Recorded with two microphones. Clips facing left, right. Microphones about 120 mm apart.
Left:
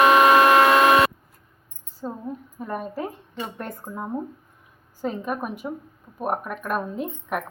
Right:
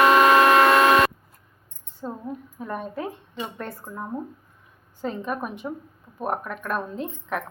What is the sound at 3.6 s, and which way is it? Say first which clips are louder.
A woman's voice: left 1 dB; 15° left (ahead or behind).